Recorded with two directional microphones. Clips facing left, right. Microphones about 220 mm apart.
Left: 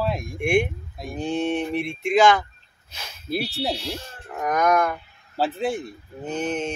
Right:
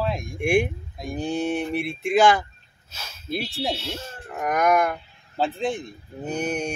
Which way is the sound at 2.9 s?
15° left (ahead or behind).